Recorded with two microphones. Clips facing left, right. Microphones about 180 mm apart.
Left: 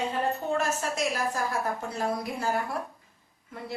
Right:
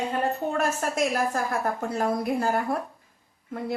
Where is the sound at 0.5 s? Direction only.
55° right (ahead or behind).